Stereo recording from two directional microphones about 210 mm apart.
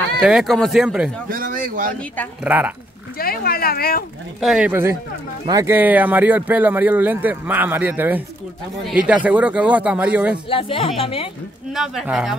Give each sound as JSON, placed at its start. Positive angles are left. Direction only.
{"t": 0.2, "sound": "speech", "side_deg": 0}
{"t": 1.3, "sound": "speech", "side_deg": -40}
{"t": 2.4, "sound": "speech", "side_deg": -5}
{"t": 3.2, "sound": "speech", "side_deg": 45}
{"t": 4.4, "sound": "speech", "side_deg": -5}
{"t": 10.5, "sound": "a woman's voice", "side_deg": 25}
{"t": 11.7, "sound": "speech", "side_deg": 0}